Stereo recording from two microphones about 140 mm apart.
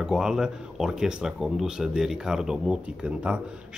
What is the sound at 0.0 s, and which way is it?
A man's voice, 5° right (ahead or behind).